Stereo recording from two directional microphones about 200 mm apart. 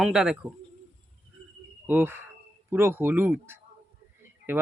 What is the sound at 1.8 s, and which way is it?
Speech, 10° right (ahead or behind).